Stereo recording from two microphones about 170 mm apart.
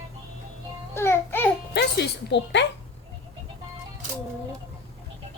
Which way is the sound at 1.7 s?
80° left.